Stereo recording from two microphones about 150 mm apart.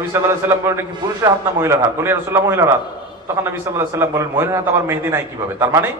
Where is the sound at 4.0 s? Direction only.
15° right (ahead or behind).